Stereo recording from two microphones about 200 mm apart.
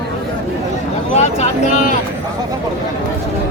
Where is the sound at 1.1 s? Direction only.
35° left (ahead or behind).